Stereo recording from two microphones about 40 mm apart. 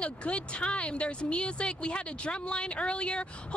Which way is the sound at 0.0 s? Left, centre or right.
Left.